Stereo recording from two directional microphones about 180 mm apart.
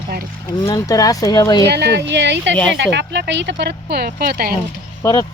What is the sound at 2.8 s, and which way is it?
Speech, 75° right (ahead or behind).